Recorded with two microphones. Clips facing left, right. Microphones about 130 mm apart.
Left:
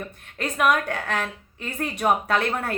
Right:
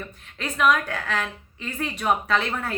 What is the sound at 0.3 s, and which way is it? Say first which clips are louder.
Speech: even; 50° left (ahead or behind).